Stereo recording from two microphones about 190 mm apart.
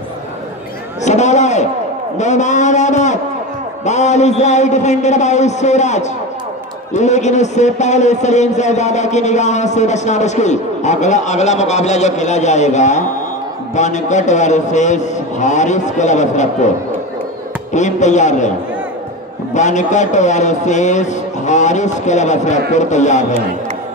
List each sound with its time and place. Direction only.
1.0 s a man's voice: 35° left (ahead or behind)
2.1 s a sound: 40° left (ahead or behind)
3.8 s a man's voice: 35° left (ahead or behind)
17.7 s a man's voice: 40° left (ahead or behind)
19.5 s a man's voice: 40° left (ahead or behind)